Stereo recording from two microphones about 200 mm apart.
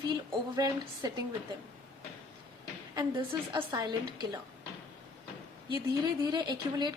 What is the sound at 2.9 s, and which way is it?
Speech, 20° right (ahead or behind).